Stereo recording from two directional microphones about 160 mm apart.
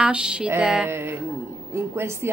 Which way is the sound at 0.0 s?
5° right (ahead or behind).